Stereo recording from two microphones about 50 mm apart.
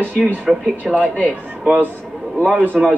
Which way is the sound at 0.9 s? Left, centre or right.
Right.